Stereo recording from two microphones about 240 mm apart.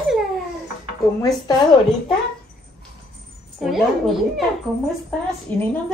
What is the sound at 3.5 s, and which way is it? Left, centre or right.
Speech, centre.